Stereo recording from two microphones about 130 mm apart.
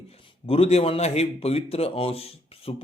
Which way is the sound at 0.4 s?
50° left (ahead or behind).